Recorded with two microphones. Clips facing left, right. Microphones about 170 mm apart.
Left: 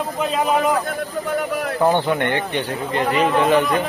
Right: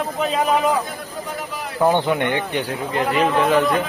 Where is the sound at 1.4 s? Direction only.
55° left (ahead or behind).